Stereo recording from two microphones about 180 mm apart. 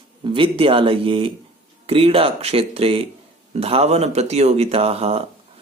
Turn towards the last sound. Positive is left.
turn(degrees=-35)  # may be behind; listen again after turning